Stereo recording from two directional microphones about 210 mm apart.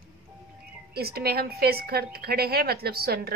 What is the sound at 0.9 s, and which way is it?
A woman's voice, 50° right (ahead or behind).